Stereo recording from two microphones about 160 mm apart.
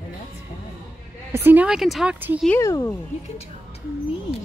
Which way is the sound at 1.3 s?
10° right (ahead or behind).